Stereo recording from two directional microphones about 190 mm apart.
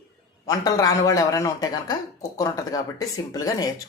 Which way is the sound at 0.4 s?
20° left (ahead or behind).